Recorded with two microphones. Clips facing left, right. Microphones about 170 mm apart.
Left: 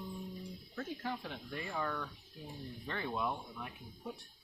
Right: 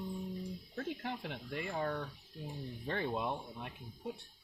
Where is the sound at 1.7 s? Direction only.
35° right (ahead or behind).